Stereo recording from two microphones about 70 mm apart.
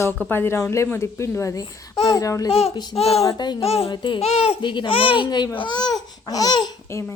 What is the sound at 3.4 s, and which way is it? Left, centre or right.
Speech, left.